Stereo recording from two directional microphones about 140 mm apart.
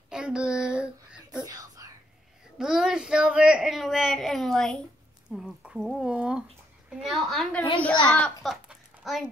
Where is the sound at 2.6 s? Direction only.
5° right (ahead or behind).